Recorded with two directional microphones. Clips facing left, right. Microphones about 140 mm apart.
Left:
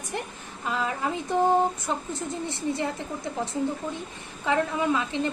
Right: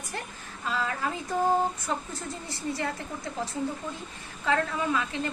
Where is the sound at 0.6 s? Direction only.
20° left (ahead or behind).